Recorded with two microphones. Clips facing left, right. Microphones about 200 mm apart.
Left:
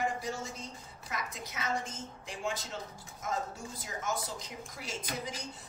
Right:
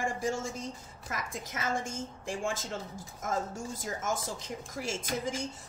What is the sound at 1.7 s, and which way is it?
A woman's voice, 50° right (ahead or behind).